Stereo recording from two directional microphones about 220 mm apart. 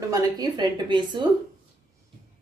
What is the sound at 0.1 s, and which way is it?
A woman's voice, 20° right (ahead or behind).